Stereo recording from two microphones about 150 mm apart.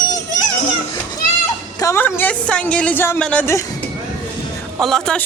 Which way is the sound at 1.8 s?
15° left (ahead or behind).